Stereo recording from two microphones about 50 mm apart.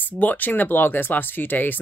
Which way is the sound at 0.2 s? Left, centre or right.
Left.